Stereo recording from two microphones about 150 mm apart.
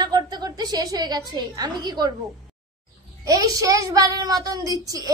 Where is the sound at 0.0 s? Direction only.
25° right (ahead or behind).